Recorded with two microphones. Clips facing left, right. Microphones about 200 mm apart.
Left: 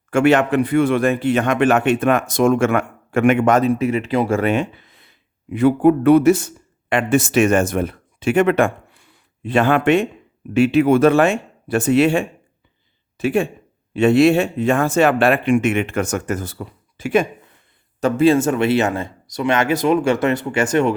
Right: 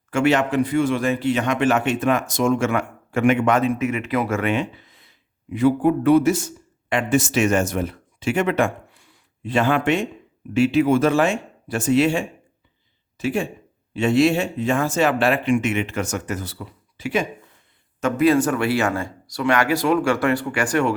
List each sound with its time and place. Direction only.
0.1 s a man's voice: 55° left (ahead or behind)
18.0 s speech: 25° left (ahead or behind)